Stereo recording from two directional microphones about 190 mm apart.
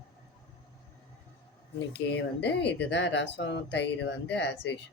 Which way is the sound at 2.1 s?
65° left (ahead or behind).